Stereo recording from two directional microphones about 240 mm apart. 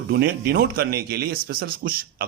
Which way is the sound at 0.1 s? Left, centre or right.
Right.